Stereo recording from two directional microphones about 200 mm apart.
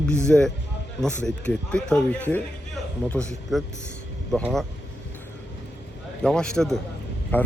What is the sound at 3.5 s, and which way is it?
Speech, centre (ahead or behind).